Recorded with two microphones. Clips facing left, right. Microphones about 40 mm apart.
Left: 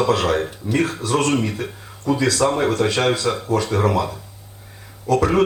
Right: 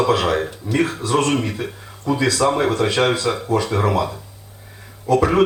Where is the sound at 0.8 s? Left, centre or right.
Centre.